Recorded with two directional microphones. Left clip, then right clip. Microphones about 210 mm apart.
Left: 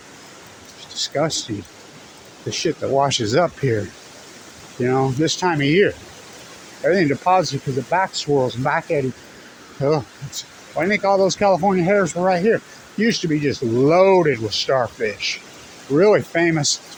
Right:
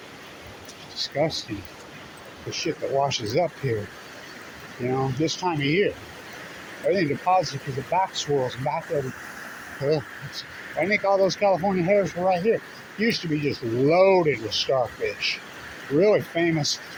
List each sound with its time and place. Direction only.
0.9 s speech: 35° left (ahead or behind)
2.5 s speech: 50° left (ahead or behind)
4.8 s speech: 45° left (ahead or behind)
6.9 s speech: 45° left (ahead or behind)
9.8 s speech: 40° left (ahead or behind)